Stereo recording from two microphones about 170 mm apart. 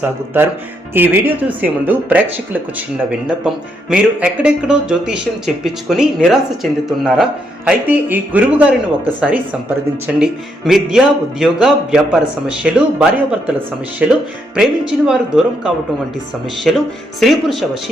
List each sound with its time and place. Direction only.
0.0 s speech: 10° right (ahead or behind)